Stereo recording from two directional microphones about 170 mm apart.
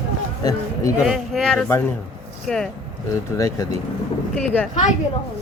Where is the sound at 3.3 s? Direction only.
20° left (ahead or behind).